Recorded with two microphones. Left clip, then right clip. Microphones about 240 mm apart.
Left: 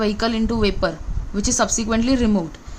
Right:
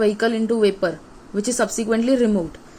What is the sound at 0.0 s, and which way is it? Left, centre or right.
A woman's voice, left.